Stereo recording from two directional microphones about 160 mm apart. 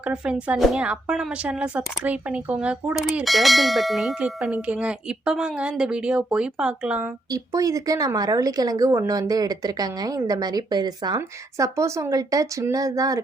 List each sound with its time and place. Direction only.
0.0 s a woman's voice: 5° right (ahead or behind)
7.3 s speech: 20° right (ahead or behind)